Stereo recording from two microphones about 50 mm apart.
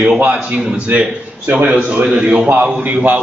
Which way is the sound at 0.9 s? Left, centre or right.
Right.